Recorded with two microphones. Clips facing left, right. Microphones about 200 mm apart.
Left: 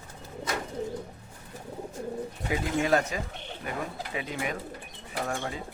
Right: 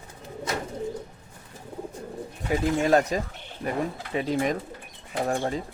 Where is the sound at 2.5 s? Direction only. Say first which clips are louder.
Right 4 dB; 40° right (ahead or behind).